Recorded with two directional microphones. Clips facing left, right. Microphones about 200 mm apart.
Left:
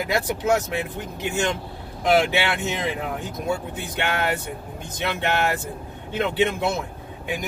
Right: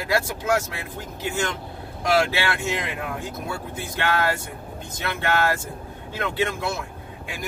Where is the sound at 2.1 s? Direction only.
20° left (ahead or behind).